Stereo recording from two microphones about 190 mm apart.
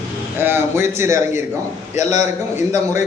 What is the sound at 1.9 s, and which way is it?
Speech, 35° left (ahead or behind).